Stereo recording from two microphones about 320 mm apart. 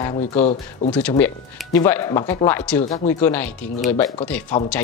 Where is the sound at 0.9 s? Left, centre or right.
Centre.